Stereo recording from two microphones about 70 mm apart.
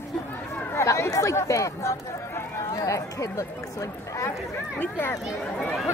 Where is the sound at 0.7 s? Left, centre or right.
Left.